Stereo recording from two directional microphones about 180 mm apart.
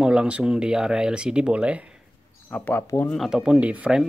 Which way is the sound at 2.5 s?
10° left (ahead or behind).